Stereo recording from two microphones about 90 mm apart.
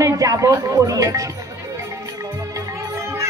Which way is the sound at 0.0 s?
40° right (ahead or behind).